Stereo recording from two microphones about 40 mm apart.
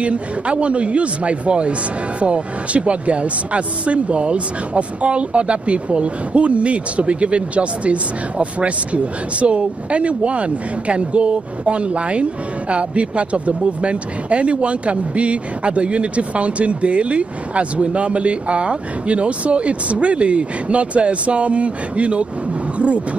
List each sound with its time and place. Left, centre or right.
0.0 s speech: right